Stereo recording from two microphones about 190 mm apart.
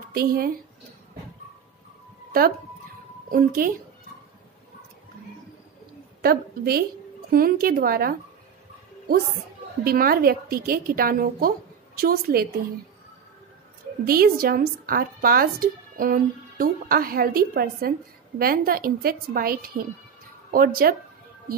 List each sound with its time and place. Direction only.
0.1 s speech: 50° right (ahead or behind)
3.3 s speech: 45° right (ahead or behind)
6.2 s a woman's voice: 55° right (ahead or behind)
9.8 s speech: 50° right (ahead or behind)
14.0 s speech: 50° right (ahead or behind)